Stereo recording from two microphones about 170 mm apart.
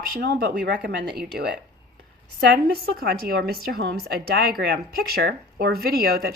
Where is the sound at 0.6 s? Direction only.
80° right.